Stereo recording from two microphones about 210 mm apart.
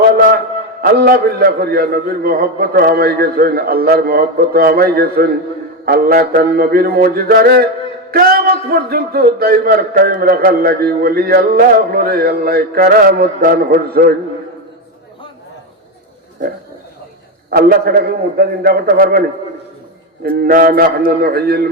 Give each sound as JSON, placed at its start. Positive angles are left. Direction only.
{"t": 0.1, "sound": "a sound", "side_deg": -40}
{"t": 0.8, "sound": "a man's voice", "side_deg": -45}
{"t": 17.5, "sound": "a man's voice", "side_deg": -45}
{"t": 20.3, "sound": "a man's voice", "side_deg": -45}